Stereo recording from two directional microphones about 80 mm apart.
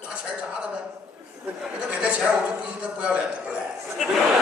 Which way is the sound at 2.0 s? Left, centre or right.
Centre.